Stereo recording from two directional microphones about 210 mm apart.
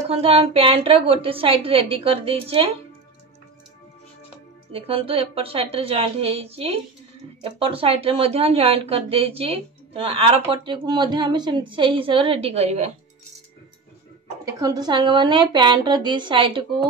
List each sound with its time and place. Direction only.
0.1 s speech: 25° right (ahead or behind)
4.7 s speech: 25° right (ahead or behind)
14.4 s speech: 20° right (ahead or behind)